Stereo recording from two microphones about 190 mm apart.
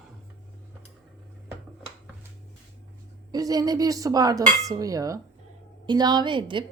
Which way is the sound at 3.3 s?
20° right (ahead or behind).